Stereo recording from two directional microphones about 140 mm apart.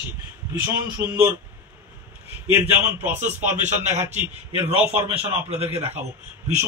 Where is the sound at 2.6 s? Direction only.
15° right (ahead or behind).